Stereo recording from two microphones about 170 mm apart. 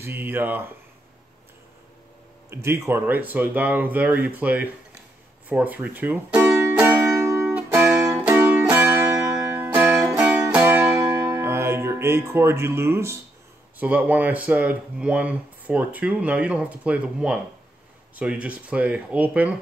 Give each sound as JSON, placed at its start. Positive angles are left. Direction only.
{"t": 0.0, "sound": "speech", "side_deg": -15}
{"t": 2.5, "sound": "speech", "side_deg": -15}
{"t": 5.5, "sound": "music", "side_deg": -10}
{"t": 13.7, "sound": "speech", "side_deg": -10}